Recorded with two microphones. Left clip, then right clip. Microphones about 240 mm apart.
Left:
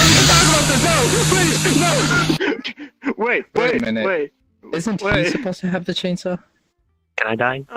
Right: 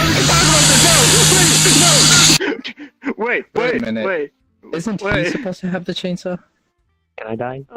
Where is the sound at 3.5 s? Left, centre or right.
Centre.